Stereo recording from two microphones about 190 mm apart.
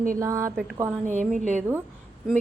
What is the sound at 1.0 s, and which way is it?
Speech, 40° right (ahead or behind).